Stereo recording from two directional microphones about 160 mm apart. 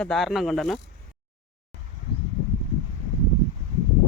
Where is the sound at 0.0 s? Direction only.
Centre (ahead or behind).